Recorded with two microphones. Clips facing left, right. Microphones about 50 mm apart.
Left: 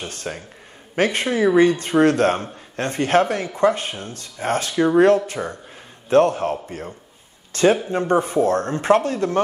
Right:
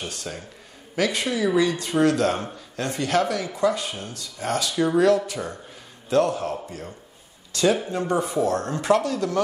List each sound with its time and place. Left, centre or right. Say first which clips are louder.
0.0 s speech: left 3 dB; left